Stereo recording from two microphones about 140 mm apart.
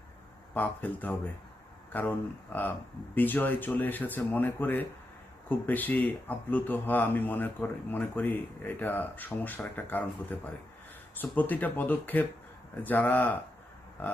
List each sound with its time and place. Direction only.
0.5 s speech: 10° left (ahead or behind)